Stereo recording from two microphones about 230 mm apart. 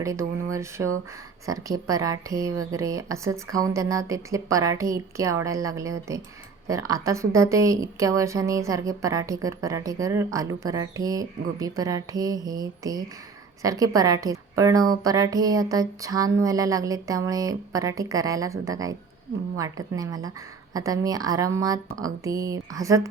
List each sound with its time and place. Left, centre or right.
0.0 s a woman's voice: centre